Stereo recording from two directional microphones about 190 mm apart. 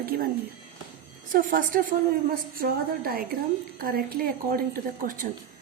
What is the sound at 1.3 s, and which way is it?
A woman's voice, 45° right (ahead or behind).